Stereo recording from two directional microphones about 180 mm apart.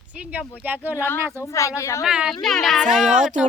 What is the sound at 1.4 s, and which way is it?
Speech, 15° left (ahead or behind).